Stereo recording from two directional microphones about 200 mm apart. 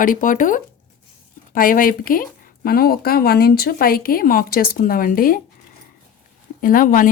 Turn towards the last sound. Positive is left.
turn(degrees=45)  # may be behind; listen again after turning